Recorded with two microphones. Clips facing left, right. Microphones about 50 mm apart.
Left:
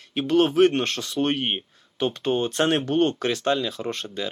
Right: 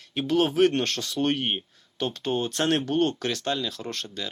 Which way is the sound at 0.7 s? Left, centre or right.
Centre.